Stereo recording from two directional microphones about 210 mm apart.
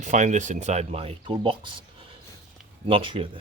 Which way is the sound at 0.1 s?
35° right (ahead or behind).